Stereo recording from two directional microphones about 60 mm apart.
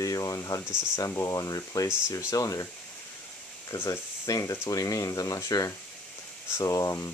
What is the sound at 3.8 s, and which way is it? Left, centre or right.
Speech, left.